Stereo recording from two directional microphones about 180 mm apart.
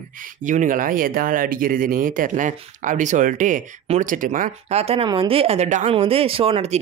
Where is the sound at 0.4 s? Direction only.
45° right (ahead or behind).